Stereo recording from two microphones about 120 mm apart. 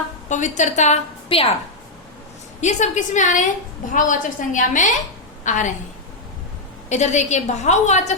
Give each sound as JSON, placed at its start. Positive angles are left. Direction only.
{"t": 0.3, "sound": "a woman's voice", "side_deg": 90}
{"t": 1.3, "sound": "a woman's voice", "side_deg": 50}
{"t": 2.6, "sound": "a woman's voice", "side_deg": 80}
{"t": 6.9, "sound": "a woman's voice", "side_deg": 75}